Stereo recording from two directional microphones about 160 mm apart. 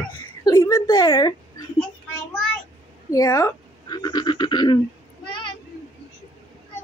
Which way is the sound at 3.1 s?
20° left (ahead or behind).